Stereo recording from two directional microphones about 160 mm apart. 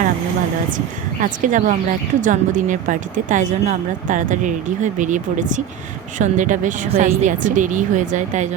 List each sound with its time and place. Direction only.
1.2 s speech: 55° right (ahead or behind)